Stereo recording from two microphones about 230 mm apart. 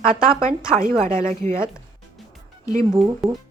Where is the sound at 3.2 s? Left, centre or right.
Centre.